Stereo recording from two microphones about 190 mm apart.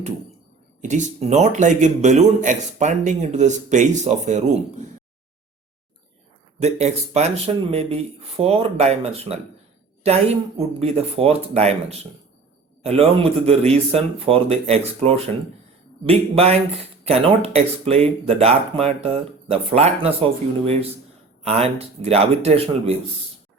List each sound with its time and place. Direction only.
0.8 s speech: 40° right (ahead or behind)
6.6 s speech: 35° right (ahead or behind)
21.4 s speech: 35° right (ahead or behind)